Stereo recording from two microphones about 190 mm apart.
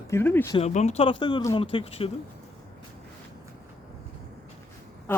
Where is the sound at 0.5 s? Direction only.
35° left (ahead or behind).